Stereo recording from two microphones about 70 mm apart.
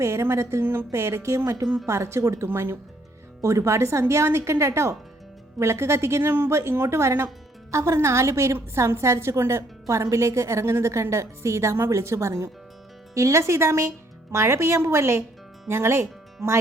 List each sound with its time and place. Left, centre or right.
0.0 s a woman's voice: right
1.6 s a woman's voice: centre
1.9 s a woman's voice: right